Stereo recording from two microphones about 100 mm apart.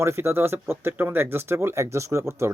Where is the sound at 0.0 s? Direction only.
25° right (ahead or behind).